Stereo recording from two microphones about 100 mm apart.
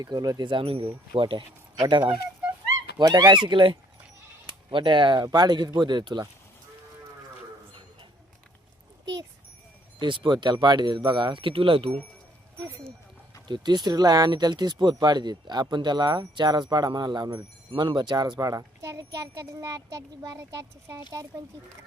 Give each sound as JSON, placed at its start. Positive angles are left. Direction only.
{"t": 0.0, "sound": "speech", "side_deg": -40}
{"t": 10.0, "sound": "speech", "side_deg": -50}
{"t": 13.5, "sound": "a child's voice", "side_deg": -45}